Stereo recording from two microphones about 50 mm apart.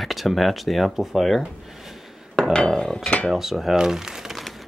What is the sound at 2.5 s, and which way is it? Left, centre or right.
Dishes, centre.